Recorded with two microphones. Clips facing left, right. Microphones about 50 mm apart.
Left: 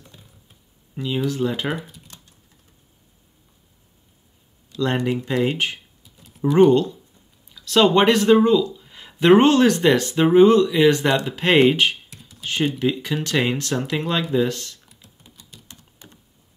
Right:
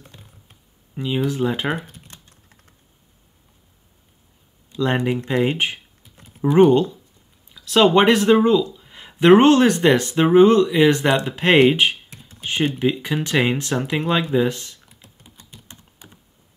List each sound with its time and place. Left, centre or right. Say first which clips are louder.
0.9 s speech: right 1 dB; centre
1.8 s typing: right 1 dB; right
4.7 s speech: right 1 dB; centre
12.1 s computer keyboard: right 1 dB; right
12.4 s speech: right 1 dB; right
15.4 s typing: right 1 dB; right